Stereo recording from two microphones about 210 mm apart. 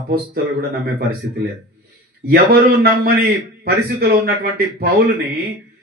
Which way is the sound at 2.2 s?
45° right (ahead or behind).